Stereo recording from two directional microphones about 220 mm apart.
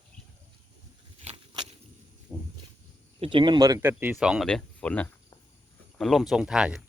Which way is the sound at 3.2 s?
25° right (ahead or behind).